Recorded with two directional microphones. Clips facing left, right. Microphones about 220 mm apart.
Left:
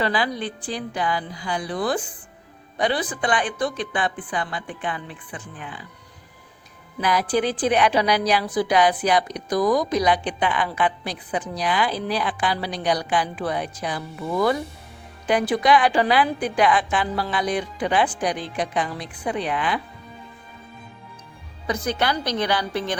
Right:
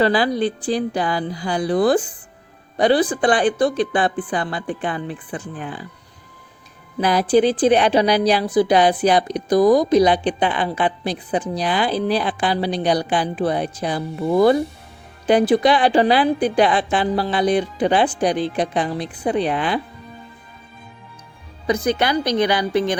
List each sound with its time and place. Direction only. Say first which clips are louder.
0.0 s speech: right 7 dB; 35° right (ahead or behind)
7.0 s a woman's voice: right 6 dB; 30° right (ahead or behind)
21.7 s a woman's voice: right 5 dB; 15° right (ahead or behind)